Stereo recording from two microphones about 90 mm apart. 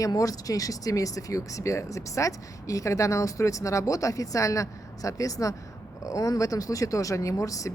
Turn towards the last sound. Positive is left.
turn(degrees=40)  # may be behind; listen again after turning